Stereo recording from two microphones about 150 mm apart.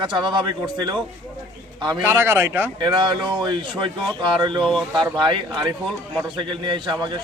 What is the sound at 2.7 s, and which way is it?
A man's voice, 30° right (ahead or behind).